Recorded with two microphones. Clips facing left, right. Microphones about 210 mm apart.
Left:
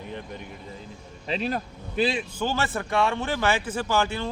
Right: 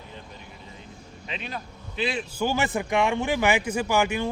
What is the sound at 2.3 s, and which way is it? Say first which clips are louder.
Speech: right 2 dB; 10° right (ahead or behind).